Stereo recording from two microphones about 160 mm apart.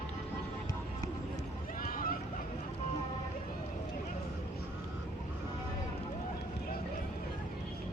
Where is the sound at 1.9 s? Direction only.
65° left (ahead or behind).